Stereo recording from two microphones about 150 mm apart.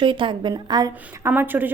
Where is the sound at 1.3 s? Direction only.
10° right (ahead or behind).